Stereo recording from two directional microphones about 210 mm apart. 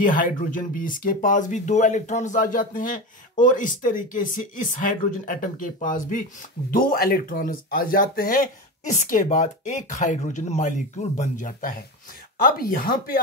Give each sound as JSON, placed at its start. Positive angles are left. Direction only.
{"t": 0.0, "sound": "speech", "side_deg": 40}